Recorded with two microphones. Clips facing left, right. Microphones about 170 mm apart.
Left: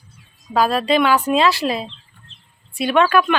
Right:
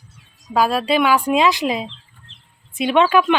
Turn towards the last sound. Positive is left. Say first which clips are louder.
# right 1 dB
turn(degrees=-20)  # may be behind; listen again after turning